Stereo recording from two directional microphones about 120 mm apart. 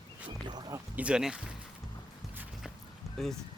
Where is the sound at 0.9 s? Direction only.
10° right (ahead or behind).